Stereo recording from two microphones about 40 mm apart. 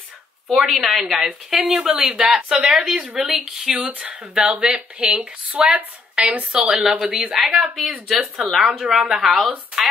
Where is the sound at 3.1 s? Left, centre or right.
Centre.